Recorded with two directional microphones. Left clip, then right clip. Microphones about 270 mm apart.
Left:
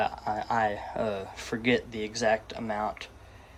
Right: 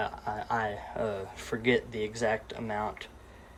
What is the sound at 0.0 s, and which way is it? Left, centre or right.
A man's voice, centre.